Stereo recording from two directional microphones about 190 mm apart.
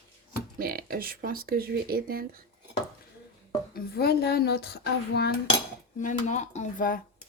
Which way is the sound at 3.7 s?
55° left (ahead or behind).